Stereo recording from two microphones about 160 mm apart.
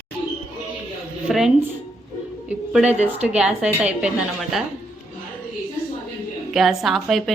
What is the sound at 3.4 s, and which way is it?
Speech, 5° right (ahead or behind).